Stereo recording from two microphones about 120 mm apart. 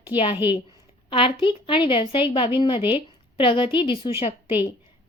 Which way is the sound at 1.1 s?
45° left (ahead or behind).